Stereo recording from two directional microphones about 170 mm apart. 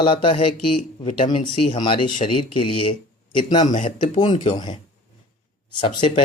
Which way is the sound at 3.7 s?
45° left (ahead or behind).